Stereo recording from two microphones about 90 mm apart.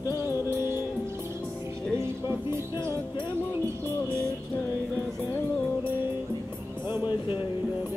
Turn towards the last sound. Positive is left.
turn(degrees=65)  # may be behind; listen again after turning